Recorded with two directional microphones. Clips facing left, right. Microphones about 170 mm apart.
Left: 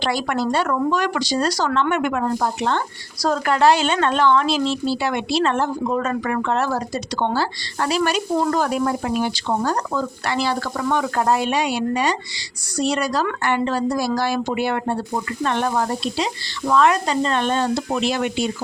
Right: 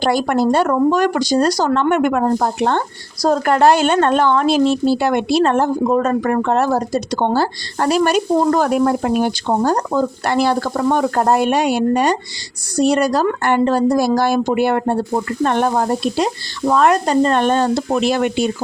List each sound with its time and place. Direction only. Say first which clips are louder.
0.0 s speech: right 6 dB; 45° right (ahead or behind)